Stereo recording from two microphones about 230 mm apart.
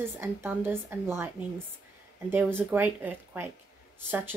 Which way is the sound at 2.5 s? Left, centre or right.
Centre.